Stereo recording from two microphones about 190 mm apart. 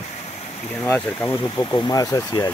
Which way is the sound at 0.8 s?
10° left (ahead or behind).